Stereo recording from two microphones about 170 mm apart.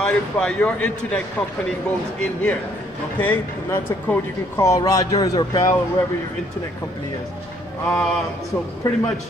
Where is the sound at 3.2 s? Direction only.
10° left (ahead or behind).